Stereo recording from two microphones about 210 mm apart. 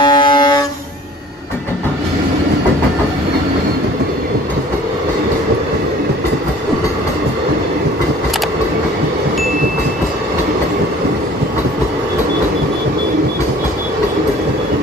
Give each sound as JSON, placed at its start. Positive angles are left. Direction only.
{"t": 0.0, "sound": "train", "side_deg": 20}